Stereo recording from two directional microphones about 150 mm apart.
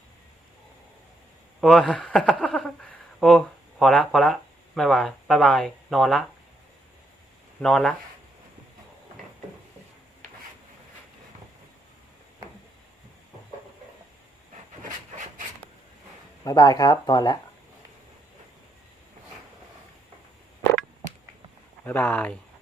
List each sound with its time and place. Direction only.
1.6 s speech: centre (ahead or behind)
2.4 s a sound: 5° left (ahead or behind)
3.2 s speech: centre (ahead or behind)
7.6 s speech: 5° left (ahead or behind)
9.2 s a sound: centre (ahead or behind)
16.4 s speech: 25° left (ahead or behind)
21.8 s speech: 10° left (ahead or behind)